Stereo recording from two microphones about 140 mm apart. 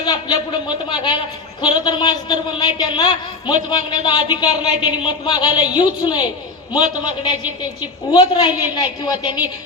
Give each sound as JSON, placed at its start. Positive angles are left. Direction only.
{"t": 0.0, "sound": "speech", "side_deg": 30}